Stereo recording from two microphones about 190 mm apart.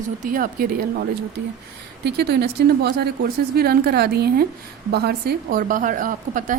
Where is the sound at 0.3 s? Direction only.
50° right (ahead or behind).